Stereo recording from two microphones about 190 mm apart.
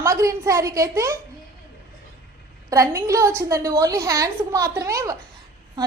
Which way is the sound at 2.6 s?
15° right (ahead or behind).